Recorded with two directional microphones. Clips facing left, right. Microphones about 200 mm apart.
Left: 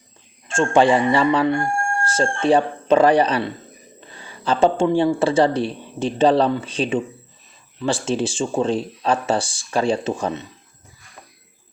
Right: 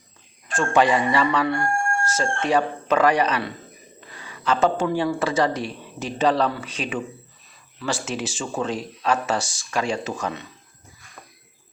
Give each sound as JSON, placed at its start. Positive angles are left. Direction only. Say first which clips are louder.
{"t": 0.4, "sound": "speech", "louder": "left 4 dB", "side_deg": 25}